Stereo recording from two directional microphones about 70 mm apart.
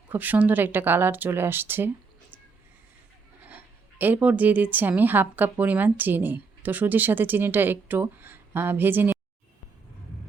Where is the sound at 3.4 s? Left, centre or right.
Right.